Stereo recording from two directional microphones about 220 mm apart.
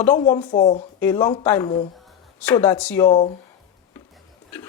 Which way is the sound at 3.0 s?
25° left (ahead or behind).